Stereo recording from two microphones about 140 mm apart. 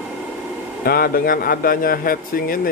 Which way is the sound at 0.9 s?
90° left.